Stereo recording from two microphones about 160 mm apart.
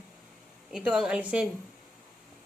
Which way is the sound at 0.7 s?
5° right (ahead or behind).